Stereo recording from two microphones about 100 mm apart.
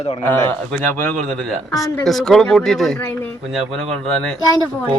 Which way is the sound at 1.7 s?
35° left (ahead or behind).